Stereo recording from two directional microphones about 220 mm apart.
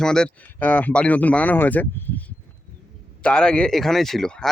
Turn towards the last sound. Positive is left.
turn(degrees=5)  # may be behind; listen again after turning